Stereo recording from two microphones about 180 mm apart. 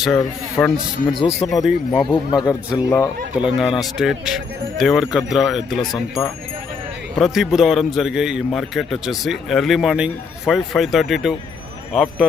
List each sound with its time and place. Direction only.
0.0 s a man's voice: centre (ahead or behind)
2.0 s speech: 25° left (ahead or behind)
3.3 s a man's voice: 5° right (ahead or behind)
7.2 s a man's voice: centre (ahead or behind)